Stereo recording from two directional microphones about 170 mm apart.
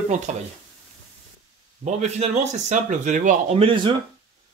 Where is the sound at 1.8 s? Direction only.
45° right (ahead or behind).